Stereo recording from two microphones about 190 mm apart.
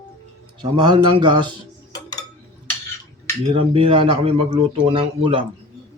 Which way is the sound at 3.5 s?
30° right (ahead or behind).